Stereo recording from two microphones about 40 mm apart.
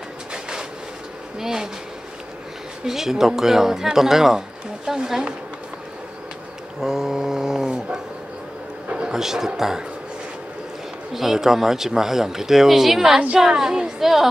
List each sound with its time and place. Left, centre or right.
0.3 s train: centre
1.4 s speech: centre
2.8 s speech: centre
6.8 s speech: centre
8.9 s a sound: right
9.2 s speech: centre
11.1 s speech: centre